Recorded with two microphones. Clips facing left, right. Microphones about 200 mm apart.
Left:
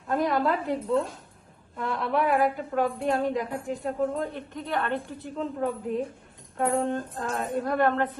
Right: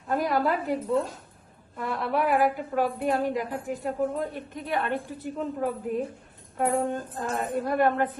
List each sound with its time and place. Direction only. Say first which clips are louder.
0.1 s a woman's voice: even; centre (ahead or behind)